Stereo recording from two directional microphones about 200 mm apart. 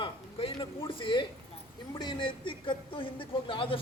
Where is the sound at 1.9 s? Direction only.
25° left (ahead or behind).